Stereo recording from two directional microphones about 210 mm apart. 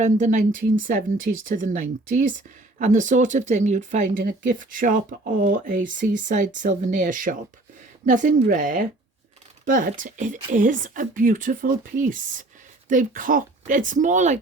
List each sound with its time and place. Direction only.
0.0 s speech: 35° right (ahead or behind)